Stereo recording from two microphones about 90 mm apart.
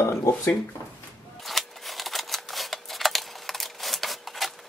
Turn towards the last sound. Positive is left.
turn(degrees=0)  # may be behind; listen again after turning